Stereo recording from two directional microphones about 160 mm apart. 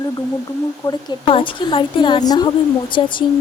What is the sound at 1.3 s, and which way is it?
Speech, 35° left (ahead or behind).